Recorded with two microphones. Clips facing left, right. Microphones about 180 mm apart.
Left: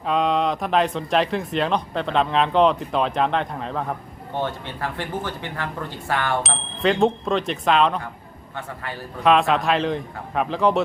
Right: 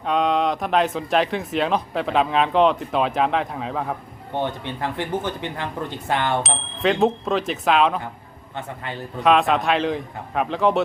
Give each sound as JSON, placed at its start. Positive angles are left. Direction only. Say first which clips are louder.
{"t": 0.0, "sound": "speech", "louder": "even", "side_deg": 0}
{"t": 4.4, "sound": "speech", "louder": "right 1 dB", "side_deg": -15}
{"t": 6.4, "sound": "speech", "louder": "even", "side_deg": 0}
{"t": 8.5, "sound": "speech", "louder": "right 1 dB", "side_deg": -20}
{"t": 9.2, "sound": "speech", "louder": "even", "side_deg": 0}